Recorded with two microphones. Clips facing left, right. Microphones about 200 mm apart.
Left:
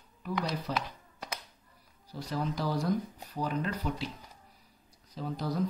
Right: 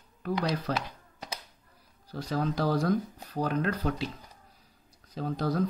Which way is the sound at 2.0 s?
90° right.